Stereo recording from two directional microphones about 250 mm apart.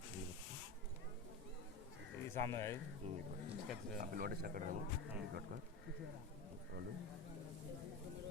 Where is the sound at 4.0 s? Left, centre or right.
Right.